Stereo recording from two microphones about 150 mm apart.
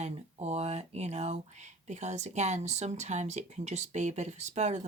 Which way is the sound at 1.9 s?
50° right (ahead or behind).